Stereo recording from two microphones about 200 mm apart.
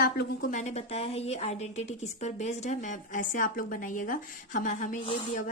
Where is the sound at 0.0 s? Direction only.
50° left (ahead or behind).